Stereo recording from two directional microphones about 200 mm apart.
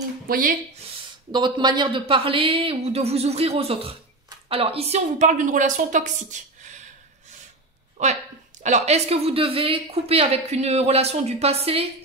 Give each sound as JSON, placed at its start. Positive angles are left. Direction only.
{"t": 0.3, "sound": "speech", "side_deg": -45}
{"t": 1.3, "sound": "speech", "side_deg": -20}
{"t": 8.6, "sound": "speech", "side_deg": -35}